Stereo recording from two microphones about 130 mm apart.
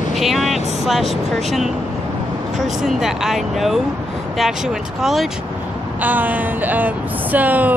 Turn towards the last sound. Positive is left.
turn(degrees=-10)  # may be behind; listen again after turning